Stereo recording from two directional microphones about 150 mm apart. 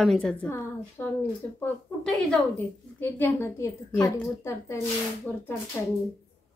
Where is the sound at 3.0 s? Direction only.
15° left (ahead or behind).